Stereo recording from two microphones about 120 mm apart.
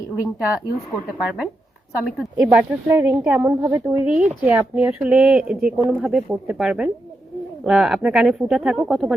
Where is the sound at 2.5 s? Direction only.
15° right (ahead or behind).